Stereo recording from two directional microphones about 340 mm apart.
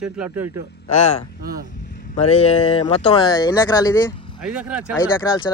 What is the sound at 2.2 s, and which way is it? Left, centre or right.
Speech, centre.